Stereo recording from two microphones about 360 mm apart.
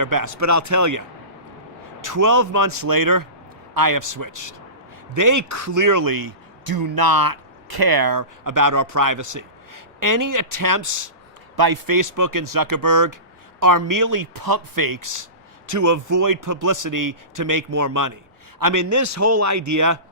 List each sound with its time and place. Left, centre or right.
0.0 s a man's voice: right
11.5 s a man's voice: right